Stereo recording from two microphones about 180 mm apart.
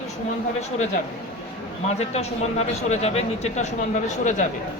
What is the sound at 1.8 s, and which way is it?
Speech, 35° left (ahead or behind).